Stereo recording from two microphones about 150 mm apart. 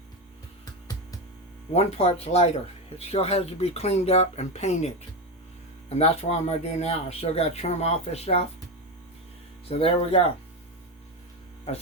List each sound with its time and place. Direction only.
1.7 s speech: 45° left (ahead or behind)
5.9 s speech: 45° left (ahead or behind)
9.6 s speech: 40° left (ahead or behind)